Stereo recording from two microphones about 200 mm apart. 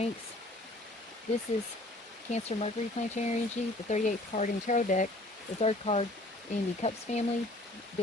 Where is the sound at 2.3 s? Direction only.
35° left (ahead or behind).